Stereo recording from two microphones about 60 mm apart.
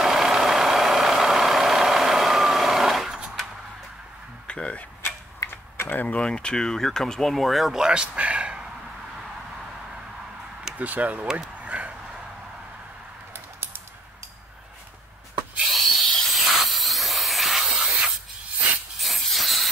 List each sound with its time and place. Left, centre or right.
0.0 s vehicle: centre
4.5 s tick-tock: centre
5.0 s mechanisms: left
5.9 s speech: left; by 7.8 s centre
7.8 s a man's voice: centre
10.8 s speech: right
11.6 s bow-wow: right
13.3 s typing: right
15.7 s hiss: centre